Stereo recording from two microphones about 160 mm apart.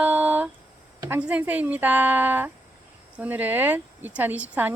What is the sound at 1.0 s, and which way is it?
Speech, 10° right (ahead or behind).